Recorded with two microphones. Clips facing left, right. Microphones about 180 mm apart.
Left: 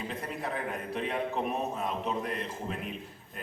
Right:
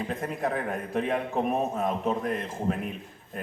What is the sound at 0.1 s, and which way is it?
A man's voice, 50° right (ahead or behind).